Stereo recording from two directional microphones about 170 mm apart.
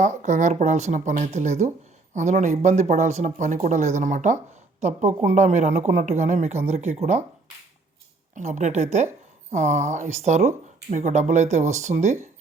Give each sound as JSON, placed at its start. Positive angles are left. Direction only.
{"t": 0.0, "sound": "speech", "side_deg": -45}
{"t": 8.4, "sound": "speech", "side_deg": -45}